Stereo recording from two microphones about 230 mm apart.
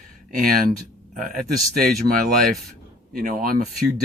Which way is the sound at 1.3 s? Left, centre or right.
Centre.